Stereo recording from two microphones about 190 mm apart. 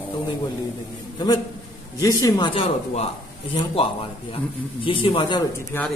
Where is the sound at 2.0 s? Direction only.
20° left (ahead or behind).